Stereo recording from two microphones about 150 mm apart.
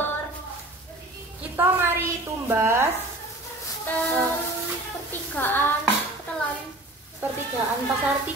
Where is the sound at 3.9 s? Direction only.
15° left (ahead or behind).